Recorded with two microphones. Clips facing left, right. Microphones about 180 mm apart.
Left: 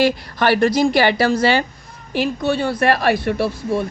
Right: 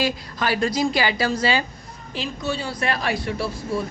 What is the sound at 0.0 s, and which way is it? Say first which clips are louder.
A woman's voice: left 7 dB; 65° left (ahead or behind).